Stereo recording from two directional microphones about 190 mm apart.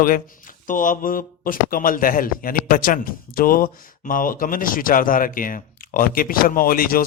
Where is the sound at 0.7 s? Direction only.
45° left (ahead or behind).